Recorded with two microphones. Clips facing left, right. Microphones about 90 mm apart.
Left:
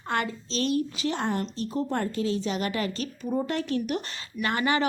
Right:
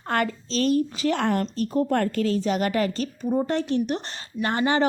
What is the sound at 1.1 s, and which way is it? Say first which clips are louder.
A woman's voice: right 6 dB; 65° right (ahead or behind).